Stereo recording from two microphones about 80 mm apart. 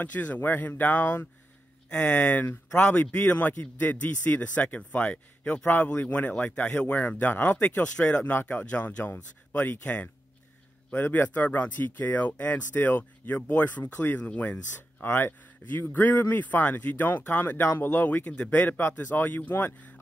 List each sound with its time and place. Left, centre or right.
0.0 s speech: left